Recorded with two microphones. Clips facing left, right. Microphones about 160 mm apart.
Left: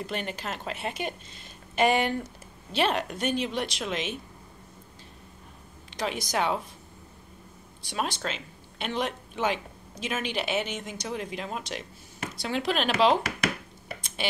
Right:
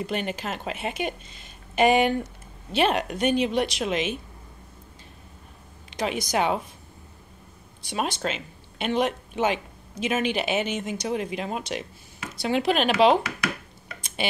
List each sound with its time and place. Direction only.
0.0 s a woman's voice: 15° right (ahead or behind)
5.9 s a woman's voice: 15° right (ahead or behind)
7.9 s a woman's voice: 15° right (ahead or behind)